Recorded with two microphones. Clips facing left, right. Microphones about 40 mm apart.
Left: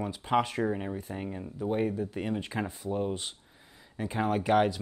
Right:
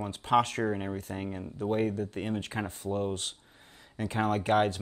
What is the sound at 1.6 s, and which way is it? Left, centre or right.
Speech, right.